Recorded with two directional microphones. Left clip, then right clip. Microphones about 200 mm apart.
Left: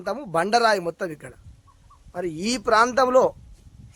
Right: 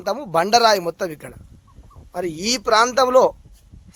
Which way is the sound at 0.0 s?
15° right (ahead or behind).